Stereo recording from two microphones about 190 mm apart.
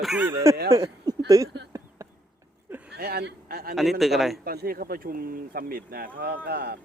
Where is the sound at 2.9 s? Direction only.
55° right (ahead or behind).